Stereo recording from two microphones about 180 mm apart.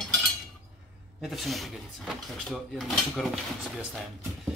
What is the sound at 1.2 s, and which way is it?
Speech, centre (ahead or behind).